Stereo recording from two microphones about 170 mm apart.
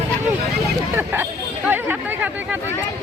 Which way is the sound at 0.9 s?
15° right (ahead or behind).